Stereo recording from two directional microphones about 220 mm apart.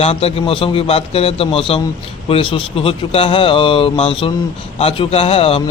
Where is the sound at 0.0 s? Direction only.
25° left (ahead or behind).